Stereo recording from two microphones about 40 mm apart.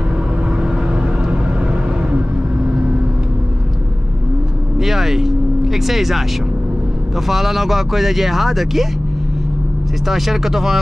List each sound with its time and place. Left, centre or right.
0.6 s vehicle: right
4.7 s vehicle: centre
7.2 s speech: centre
10.0 s speech: centre